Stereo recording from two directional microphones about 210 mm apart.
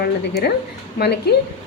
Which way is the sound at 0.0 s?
50° left (ahead or behind).